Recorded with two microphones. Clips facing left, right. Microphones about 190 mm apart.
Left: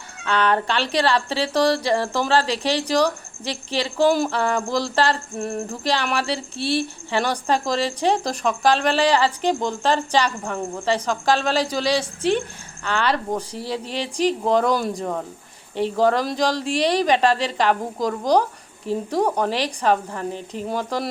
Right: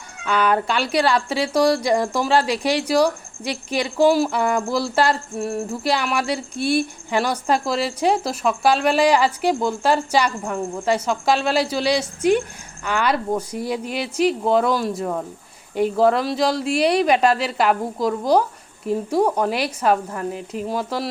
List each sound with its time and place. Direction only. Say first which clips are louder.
0.3 s speech: right 1 dB; 10° right (ahead or behind)